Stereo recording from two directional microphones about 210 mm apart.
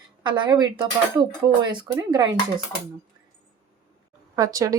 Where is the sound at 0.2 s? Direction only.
20° right (ahead or behind).